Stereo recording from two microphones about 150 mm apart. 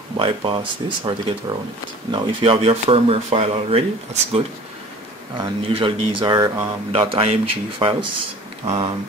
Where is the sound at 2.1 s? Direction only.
35° right (ahead or behind).